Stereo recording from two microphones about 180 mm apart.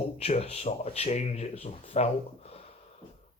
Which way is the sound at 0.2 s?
35° left (ahead or behind).